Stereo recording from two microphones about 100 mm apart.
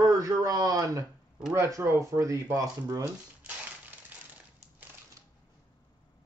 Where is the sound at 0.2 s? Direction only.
35° right (ahead or behind).